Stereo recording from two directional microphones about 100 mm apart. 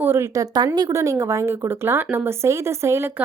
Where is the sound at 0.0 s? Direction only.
25° right (ahead or behind).